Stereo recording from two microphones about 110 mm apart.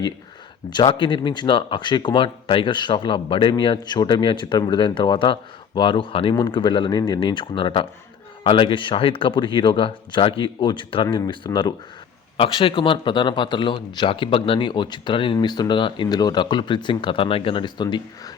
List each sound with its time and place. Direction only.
0.7 s speech: 45° left (ahead or behind)